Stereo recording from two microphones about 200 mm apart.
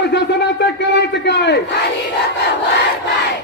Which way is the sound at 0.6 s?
60° left (ahead or behind).